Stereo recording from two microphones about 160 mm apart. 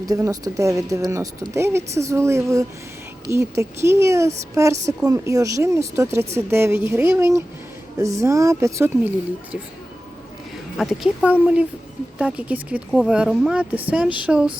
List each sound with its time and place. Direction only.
0.0 s speech: 20° right (ahead or behind)
10.8 s speech: centre (ahead or behind)